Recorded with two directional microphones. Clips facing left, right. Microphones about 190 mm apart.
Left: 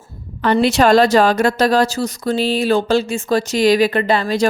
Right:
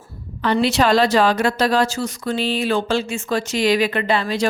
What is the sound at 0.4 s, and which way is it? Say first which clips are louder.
A woman's voice: left 4 dB; 50° left (ahead or behind).